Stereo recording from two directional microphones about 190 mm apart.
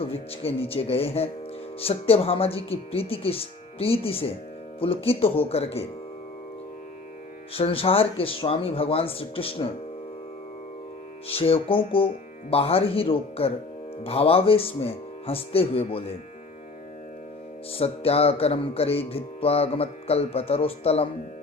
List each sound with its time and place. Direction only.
0.0 s music: 30° left (ahead or behind)
7.5 s speech: 30° left (ahead or behind)
11.3 s speech: 30° left (ahead or behind)
17.7 s music: 30° left (ahead or behind)